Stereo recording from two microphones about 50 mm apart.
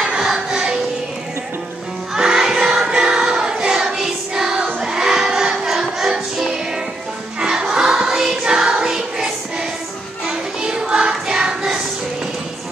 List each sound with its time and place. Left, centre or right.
0.0 s music: centre
2.1 s choir: centre
4.8 s music: centre
10.2 s child singing: centre